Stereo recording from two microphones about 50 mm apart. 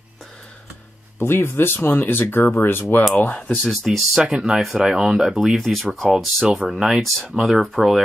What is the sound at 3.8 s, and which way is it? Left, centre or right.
Speech, centre.